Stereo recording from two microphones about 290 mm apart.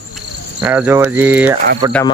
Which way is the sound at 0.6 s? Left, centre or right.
Centre.